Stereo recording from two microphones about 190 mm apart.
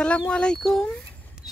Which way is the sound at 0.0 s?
5° left (ahead or behind).